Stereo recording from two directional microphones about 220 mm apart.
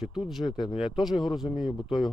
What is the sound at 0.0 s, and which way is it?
Speech, centre (ahead or behind).